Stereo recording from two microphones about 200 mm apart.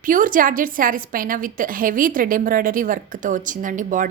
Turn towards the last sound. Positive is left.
turn(degrees=-40)  # may be behind; listen again after turning